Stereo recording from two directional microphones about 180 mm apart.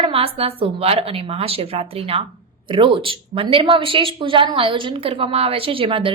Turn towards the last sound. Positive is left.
turn(degrees=-30)  # may be behind; listen again after turning